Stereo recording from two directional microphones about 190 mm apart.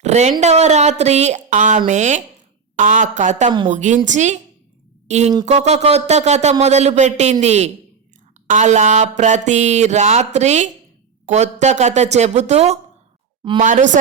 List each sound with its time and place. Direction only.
0.0 s speech: 35° right (ahead or behind)